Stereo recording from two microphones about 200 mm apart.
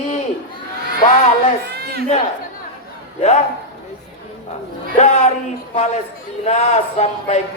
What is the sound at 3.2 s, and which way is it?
Speech, 35° left (ahead or behind).